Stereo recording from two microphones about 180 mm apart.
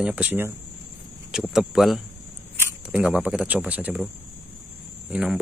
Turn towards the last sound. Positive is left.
turn(degrees=-5)  # may be behind; listen again after turning